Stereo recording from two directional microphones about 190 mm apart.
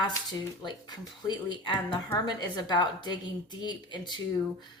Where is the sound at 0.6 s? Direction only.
25° left (ahead or behind).